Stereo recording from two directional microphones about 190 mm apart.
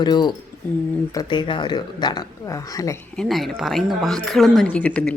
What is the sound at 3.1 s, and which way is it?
Speech, centre (ahead or behind).